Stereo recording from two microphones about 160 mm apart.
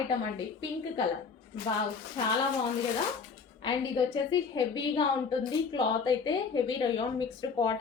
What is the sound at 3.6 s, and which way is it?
A woman's voice, 30° left (ahead or behind).